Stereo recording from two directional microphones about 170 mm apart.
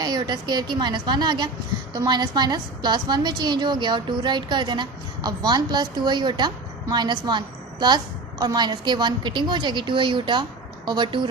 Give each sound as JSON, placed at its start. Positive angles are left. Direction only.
{"t": 0.0, "sound": "a woman's voice", "side_deg": -25}